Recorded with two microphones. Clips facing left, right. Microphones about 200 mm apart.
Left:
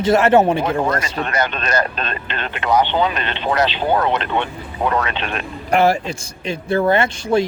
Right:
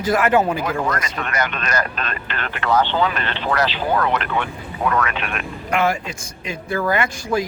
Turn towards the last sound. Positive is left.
turn(degrees=25)  # may be behind; listen again after turning